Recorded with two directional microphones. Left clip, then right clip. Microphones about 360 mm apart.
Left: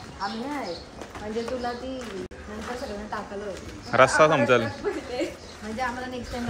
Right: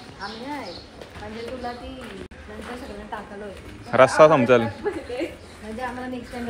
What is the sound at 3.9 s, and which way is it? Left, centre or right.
Speech, centre.